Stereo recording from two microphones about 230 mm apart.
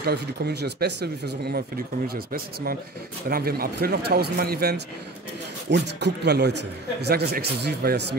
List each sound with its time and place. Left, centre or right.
0.0 s speech: right